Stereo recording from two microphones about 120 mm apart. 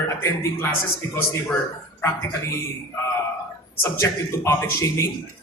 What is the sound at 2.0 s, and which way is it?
Speech, 25° left (ahead or behind).